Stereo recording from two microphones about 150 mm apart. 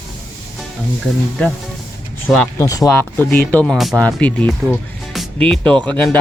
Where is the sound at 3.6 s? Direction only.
Centre (ahead or behind).